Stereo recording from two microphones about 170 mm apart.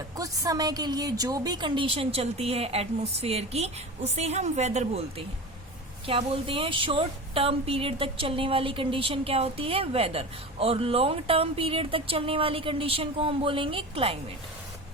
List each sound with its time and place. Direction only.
0.2 s a woman's voice: 20° right (ahead or behind); by 14.2 s 35° right (ahead or behind)